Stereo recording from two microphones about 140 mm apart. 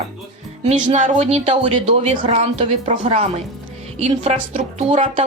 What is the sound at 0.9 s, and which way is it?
Speech, 55° right (ahead or behind).